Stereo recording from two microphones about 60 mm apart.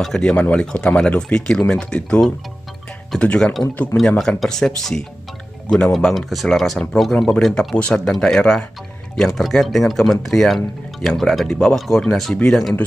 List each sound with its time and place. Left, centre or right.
0.0 s speech: centre
0.4 s speech: left
4.2 s speech: centre